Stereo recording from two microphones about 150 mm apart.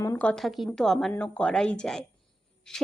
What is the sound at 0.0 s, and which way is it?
A woman's voice, 10° left (ahead or behind).